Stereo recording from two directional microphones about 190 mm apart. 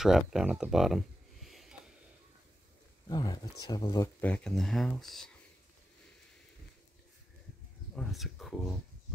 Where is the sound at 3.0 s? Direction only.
20° left (ahead or behind).